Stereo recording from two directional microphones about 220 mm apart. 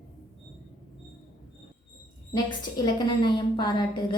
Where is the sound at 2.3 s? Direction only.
20° left (ahead or behind).